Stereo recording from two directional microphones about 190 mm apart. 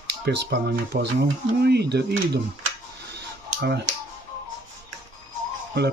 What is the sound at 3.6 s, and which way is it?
Speech, 60° right (ahead or behind).